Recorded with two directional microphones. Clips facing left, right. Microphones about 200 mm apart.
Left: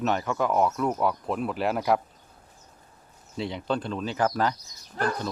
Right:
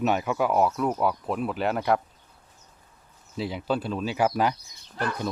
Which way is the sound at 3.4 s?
5° right (ahead or behind).